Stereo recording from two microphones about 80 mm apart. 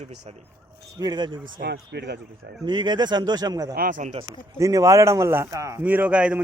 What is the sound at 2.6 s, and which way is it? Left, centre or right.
Speech, right.